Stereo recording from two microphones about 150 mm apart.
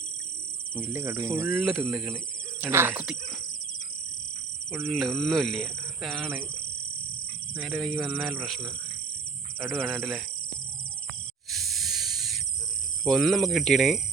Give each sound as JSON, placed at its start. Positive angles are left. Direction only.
{"t": 0.8, "sound": "speech", "side_deg": -15}
{"t": 1.5, "sound": "speech", "side_deg": 0}
{"t": 4.8, "sound": "speech", "side_deg": 0}
{"t": 7.5, "sound": "speech", "side_deg": -10}
{"t": 7.8, "sound": "speech", "side_deg": 0}
{"t": 9.7, "sound": "speech", "side_deg": 0}
{"t": 11.5, "sound": "hiss", "side_deg": 0}
{"t": 12.1, "sound": "owl", "side_deg": 0}
{"t": 13.1, "sound": "speech", "side_deg": 0}